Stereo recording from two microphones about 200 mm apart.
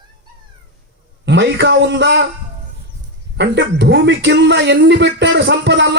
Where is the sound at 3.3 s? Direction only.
60° right (ahead or behind).